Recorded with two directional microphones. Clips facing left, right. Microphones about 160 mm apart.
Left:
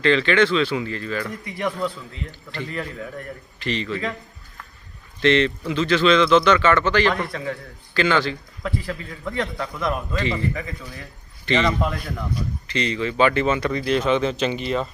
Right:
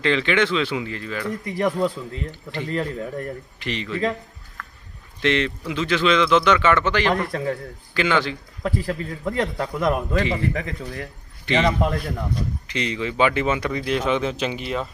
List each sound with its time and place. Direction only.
0.0 s speech: 15° right (ahead or behind)
1.5 s a man's voice: 40° right (ahead or behind)
3.6 s speech: 15° right (ahead or behind)
5.2 s speech: 10° right (ahead or behind)
8.6 s a man's voice: 40° right (ahead or behind)
10.5 s a man's voice: 70° right (ahead or behind)
11.4 s a man's voice: 15° right (ahead or behind)